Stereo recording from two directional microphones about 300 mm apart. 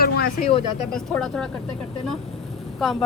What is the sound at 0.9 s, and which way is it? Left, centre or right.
Speech, centre.